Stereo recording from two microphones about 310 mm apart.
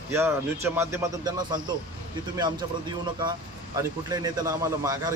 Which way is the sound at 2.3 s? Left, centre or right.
Centre.